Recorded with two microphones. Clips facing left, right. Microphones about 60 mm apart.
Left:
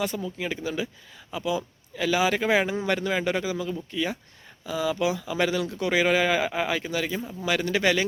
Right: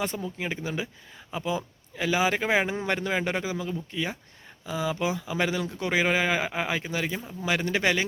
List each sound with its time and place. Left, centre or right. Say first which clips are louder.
0.0 s speech: left 2 dB; right